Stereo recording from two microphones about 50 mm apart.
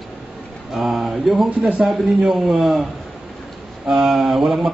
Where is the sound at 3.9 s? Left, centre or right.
Centre.